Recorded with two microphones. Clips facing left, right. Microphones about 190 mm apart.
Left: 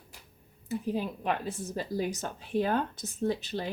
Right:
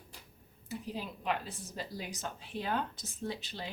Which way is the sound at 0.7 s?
50° left (ahead or behind).